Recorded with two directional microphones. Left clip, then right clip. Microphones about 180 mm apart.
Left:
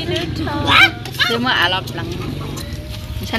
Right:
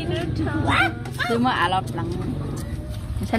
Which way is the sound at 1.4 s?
55° right (ahead or behind).